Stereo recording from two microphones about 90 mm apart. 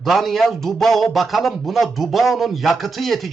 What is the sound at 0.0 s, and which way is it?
A man's voice, centre (ahead or behind).